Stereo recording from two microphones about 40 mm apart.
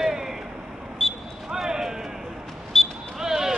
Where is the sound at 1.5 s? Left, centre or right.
Centre.